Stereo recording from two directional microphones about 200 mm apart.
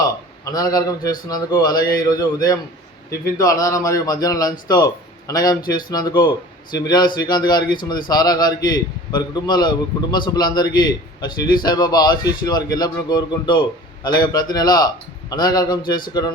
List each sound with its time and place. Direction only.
0.4 s a man's voice: 20° left (ahead or behind)